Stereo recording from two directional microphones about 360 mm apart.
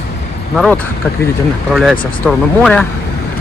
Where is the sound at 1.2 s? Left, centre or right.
Centre.